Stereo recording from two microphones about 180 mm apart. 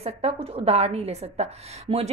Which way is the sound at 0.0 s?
35° right (ahead or behind).